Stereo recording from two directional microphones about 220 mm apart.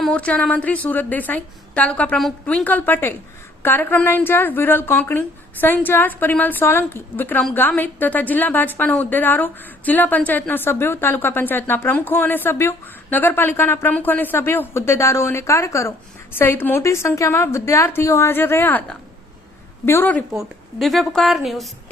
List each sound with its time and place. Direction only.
0.0 s a woman's voice: 5° left (ahead or behind)